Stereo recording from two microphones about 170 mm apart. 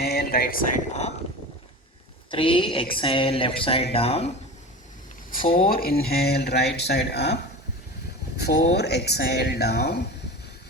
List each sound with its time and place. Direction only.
0.0 s a sound: 65° left (ahead or behind)
2.3 s speech: 30° left (ahead or behind)
5.3 s speech: 55° left (ahead or behind); by 7.3 s 75° left (ahead or behind)
8.4 s speech: 75° left (ahead or behind)